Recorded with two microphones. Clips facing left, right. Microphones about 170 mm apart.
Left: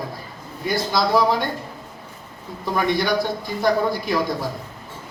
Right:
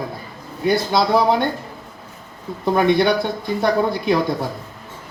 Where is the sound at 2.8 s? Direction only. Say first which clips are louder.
Right 3 dB; 60° right (ahead or behind).